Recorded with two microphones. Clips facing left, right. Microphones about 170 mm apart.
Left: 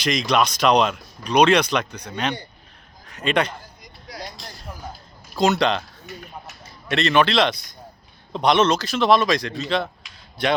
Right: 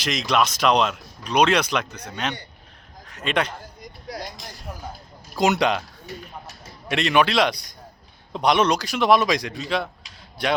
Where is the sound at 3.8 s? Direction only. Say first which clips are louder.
Right 4 dB; 50° right (ahead or behind).